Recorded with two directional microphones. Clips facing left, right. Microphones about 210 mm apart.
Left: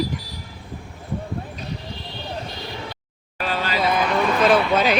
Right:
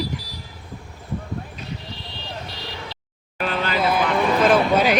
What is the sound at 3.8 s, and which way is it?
Vehicle, 5° right (ahead or behind).